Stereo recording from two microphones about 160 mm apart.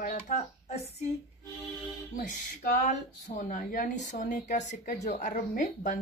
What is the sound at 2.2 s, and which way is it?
Speech, 55° left (ahead or behind).